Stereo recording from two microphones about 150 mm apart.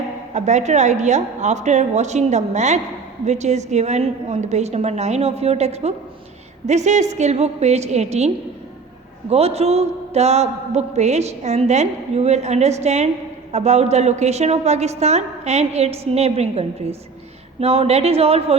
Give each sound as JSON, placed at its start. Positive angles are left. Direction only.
{"t": 0.3, "sound": "a man's voice", "side_deg": -50}
{"t": 9.3, "sound": "a man's voice", "side_deg": -45}